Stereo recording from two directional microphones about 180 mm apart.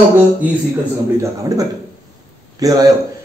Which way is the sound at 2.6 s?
20° right (ahead or behind).